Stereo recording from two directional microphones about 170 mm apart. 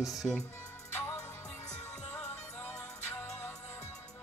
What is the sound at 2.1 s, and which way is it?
Music, 15° left (ahead or behind).